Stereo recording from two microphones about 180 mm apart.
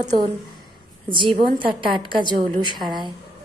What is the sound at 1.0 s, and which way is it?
A woman's voice, 25° right (ahead or behind).